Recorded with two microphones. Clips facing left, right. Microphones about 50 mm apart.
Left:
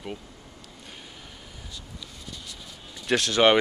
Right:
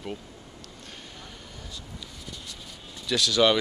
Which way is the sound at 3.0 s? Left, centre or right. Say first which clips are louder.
Left 2 dB; left.